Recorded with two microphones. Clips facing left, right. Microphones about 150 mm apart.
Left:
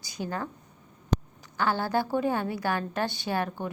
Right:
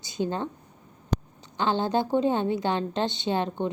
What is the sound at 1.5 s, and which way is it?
A woman's voice, 20° right (ahead or behind).